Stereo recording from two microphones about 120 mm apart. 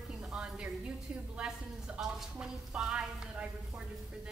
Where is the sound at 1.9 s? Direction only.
5° right (ahead or behind).